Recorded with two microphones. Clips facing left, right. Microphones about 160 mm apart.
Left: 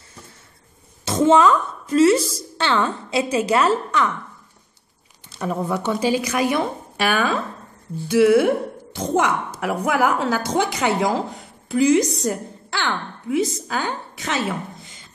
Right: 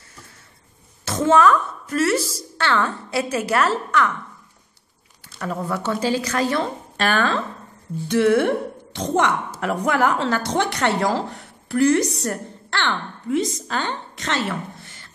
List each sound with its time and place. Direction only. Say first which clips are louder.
1.0 s a woman's voice: left 1 dB; 20° left (ahead or behind)
5.4 s a woman's voice: left 2 dB; 15° left (ahead or behind)